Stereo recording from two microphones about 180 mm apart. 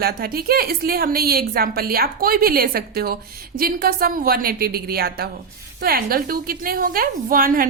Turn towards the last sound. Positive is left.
turn(degrees=-50)  # may be behind; listen again after turning